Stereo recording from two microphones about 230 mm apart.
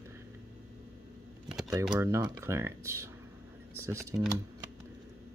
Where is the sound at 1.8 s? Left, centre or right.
Centre.